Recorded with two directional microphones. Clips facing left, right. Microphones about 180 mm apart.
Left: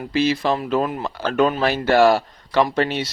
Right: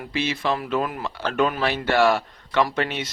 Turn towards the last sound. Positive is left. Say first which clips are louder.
# left 4 dB
turn(degrees=35)  # may be behind; listen again after turning